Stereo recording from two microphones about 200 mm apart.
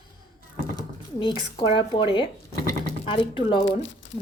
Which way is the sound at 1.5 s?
25° left (ahead or behind).